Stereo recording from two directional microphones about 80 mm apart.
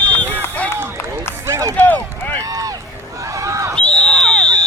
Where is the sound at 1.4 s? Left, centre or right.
Right.